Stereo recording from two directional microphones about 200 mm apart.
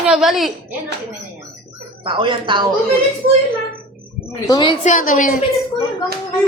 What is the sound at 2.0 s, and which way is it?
Speech, 25° right (ahead or behind).